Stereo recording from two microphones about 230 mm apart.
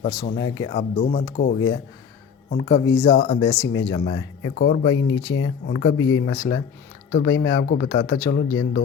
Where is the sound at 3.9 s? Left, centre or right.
Left.